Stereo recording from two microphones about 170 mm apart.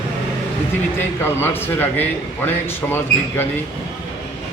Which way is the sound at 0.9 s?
15° left (ahead or behind).